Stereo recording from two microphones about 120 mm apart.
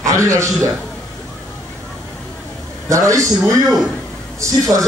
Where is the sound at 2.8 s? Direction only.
25° right (ahead or behind).